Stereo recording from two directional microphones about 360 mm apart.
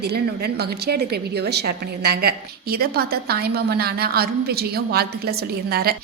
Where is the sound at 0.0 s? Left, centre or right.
Right.